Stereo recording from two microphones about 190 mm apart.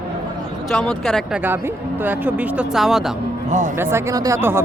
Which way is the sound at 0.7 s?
Centre (ahead or behind).